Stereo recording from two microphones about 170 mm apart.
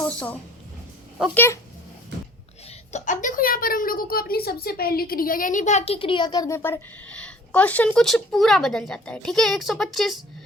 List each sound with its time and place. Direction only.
0.1 s speech: 10° left (ahead or behind)
2.6 s a woman's voice: 45° left (ahead or behind); by 10.2 s centre (ahead or behind)